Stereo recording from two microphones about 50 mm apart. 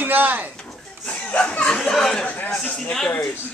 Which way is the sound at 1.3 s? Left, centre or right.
Left.